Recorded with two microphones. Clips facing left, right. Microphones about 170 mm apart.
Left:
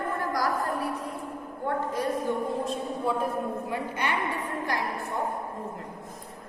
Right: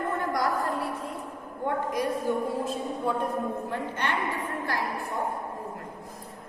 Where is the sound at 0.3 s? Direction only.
25° right (ahead or behind).